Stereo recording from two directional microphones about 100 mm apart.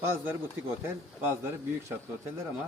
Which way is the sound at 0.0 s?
25° right (ahead or behind).